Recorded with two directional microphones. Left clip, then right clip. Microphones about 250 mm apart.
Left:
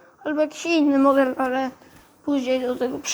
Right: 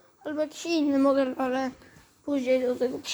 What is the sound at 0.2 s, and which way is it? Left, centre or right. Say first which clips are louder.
Speech: left 7 dB; centre.